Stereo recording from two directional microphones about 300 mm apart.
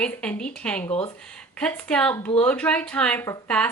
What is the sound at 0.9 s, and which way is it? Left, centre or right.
Speech, centre.